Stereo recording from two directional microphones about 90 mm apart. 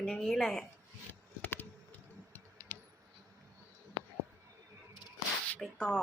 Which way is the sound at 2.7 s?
20° left (ahead or behind).